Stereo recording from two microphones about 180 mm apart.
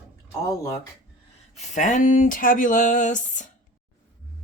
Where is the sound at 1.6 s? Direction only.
45° left (ahead or behind).